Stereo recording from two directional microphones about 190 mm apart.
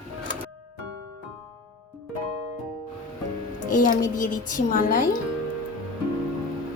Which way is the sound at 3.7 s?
45° left (ahead or behind).